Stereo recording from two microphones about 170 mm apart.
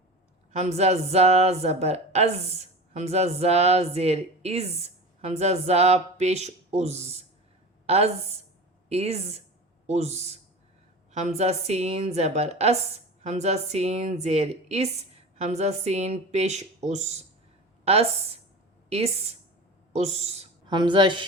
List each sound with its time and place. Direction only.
0.5 s a woman's voice: 40° right (ahead or behind)
20.7 s a woman's voice: 25° right (ahead or behind)